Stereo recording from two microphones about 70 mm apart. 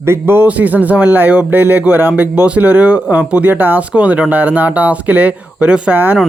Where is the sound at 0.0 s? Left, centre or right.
Right.